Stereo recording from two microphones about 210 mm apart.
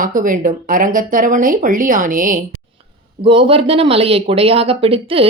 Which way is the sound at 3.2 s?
25° right (ahead or behind).